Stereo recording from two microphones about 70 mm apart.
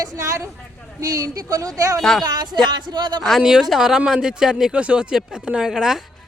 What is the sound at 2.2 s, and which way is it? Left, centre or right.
Speech, right.